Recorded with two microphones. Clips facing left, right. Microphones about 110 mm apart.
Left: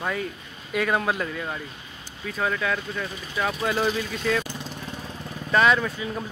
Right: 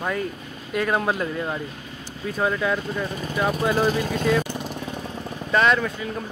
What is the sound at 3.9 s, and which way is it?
Speech, 45° right (ahead or behind).